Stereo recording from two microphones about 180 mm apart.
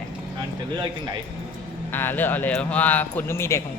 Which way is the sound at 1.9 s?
10° left (ahead or behind).